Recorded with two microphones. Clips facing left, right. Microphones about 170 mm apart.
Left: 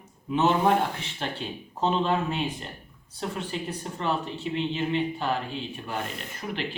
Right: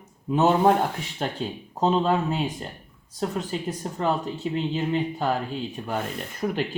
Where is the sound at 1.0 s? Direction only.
40° right (ahead or behind).